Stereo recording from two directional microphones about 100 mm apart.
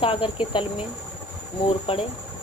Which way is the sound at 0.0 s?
65° left (ahead or behind).